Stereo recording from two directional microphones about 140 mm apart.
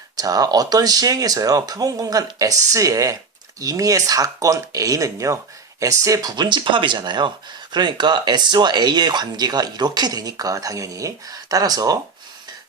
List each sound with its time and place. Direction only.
0.2 s speech: 25° right (ahead or behind)